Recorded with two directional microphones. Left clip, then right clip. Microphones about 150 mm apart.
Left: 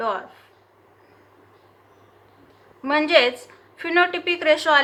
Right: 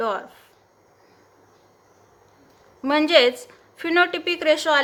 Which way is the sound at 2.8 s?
90° right.